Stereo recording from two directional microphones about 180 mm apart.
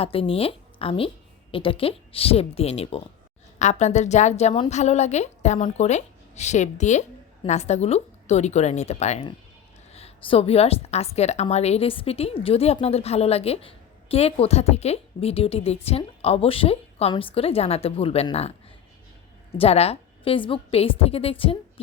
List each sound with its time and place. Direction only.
0.0 s a woman's voice: 30° left (ahead or behind)
19.5 s a woman's voice: 35° left (ahead or behind)